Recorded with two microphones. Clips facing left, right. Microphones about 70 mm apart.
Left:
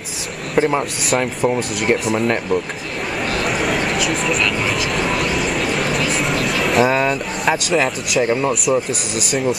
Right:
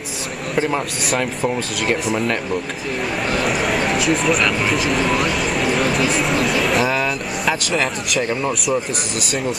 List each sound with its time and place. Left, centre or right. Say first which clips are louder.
0.6 s speech: left 4 dB; centre
3.4 s a sound: even; centre
4.1 s speech: right 2 dB; centre
6.9 s speech: left 3 dB; centre
7.4 s speech: left 3 dB; centre